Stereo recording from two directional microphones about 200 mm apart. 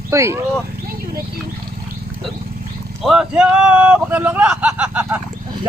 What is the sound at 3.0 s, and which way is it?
Speech, centre (ahead or behind).